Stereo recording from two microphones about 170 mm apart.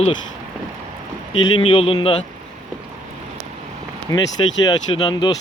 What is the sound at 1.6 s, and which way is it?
Speech, 30° left (ahead or behind).